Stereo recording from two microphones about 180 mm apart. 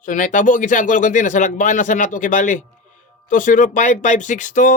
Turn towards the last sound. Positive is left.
turn(degrees=45)  # may be behind; listen again after turning